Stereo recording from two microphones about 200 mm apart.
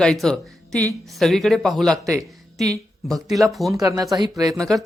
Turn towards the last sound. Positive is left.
turn(degrees=0)  # may be behind; listen again after turning